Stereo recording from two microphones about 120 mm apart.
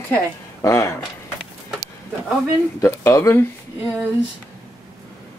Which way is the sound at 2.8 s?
20° left (ahead or behind).